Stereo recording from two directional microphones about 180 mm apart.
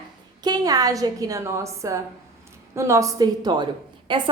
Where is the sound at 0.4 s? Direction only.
20° right (ahead or behind).